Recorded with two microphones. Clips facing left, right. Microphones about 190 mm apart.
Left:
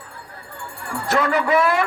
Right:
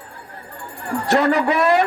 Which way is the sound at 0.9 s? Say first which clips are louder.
Right 3 dB; 40° right (ahead or behind).